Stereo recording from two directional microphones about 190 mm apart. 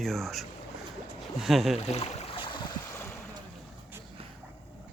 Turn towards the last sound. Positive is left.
turn(degrees=10)  # may be behind; listen again after turning